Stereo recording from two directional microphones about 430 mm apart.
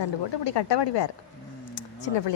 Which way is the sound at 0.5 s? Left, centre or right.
Left.